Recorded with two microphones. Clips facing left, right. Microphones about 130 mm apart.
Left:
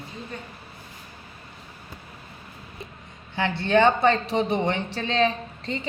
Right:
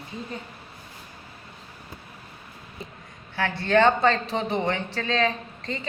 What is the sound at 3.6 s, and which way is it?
A man's voice, 15° left (ahead or behind).